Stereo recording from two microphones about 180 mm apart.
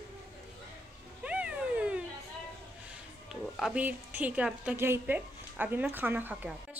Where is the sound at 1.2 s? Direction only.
5° right (ahead or behind).